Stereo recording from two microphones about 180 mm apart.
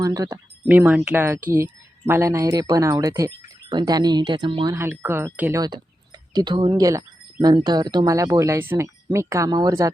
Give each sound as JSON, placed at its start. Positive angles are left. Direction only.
{"t": 0.0, "sound": "speech", "side_deg": -20}
{"t": 0.7, "sound": "speech", "side_deg": -10}
{"t": 4.8, "sound": "speech", "side_deg": -10}